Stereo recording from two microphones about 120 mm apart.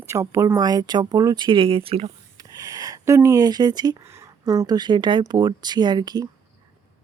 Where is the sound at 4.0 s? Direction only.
25° right (ahead or behind).